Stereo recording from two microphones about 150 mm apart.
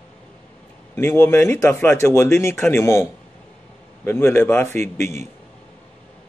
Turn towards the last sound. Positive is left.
turn(degrees=15)  # may be behind; listen again after turning